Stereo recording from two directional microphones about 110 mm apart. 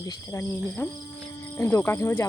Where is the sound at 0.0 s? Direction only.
30° left (ahead or behind).